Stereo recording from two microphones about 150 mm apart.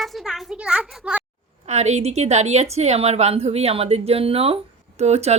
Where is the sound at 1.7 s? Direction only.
50° right (ahead or behind).